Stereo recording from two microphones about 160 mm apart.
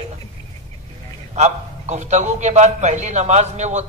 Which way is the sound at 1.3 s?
45° right (ahead or behind).